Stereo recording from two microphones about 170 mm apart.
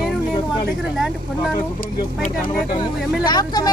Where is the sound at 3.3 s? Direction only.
25° left (ahead or behind).